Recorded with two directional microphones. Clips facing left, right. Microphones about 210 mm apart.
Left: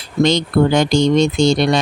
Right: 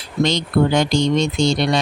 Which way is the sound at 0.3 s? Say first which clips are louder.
Left 3 dB; 50° left (ahead or behind).